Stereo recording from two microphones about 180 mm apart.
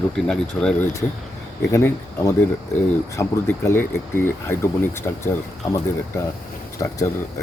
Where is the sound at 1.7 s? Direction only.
15° left (ahead or behind).